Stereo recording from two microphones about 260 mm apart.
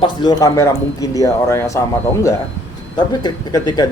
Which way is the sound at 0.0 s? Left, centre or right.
Centre.